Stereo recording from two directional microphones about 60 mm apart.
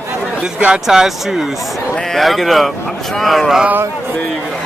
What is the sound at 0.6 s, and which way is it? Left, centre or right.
Speech, centre.